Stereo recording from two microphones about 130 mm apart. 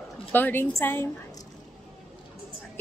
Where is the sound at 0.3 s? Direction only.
15° left (ahead or behind).